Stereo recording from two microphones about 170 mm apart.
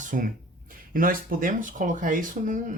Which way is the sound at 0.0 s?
50° right (ahead or behind).